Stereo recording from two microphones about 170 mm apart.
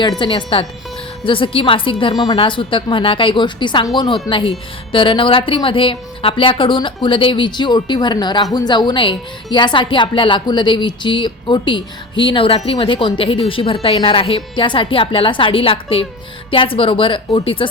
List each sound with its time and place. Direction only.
0.2 s a woman's voice: 30° left (ahead or behind)